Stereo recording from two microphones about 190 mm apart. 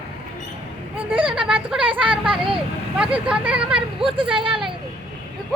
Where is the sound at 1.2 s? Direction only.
30° right (ahead or behind).